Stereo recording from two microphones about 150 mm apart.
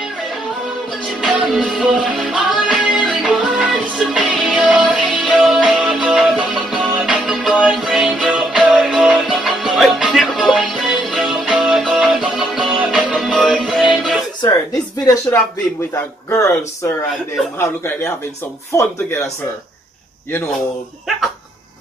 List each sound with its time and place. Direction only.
1.2 s music: 5° right (ahead or behind)
15.9 s speech: 20° left (ahead or behind)